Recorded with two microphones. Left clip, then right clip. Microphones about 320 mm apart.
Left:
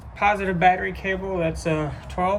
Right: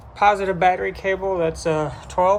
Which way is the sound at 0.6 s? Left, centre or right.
Centre.